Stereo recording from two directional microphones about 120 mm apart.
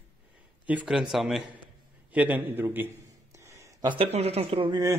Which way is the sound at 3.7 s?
40° right (ahead or behind).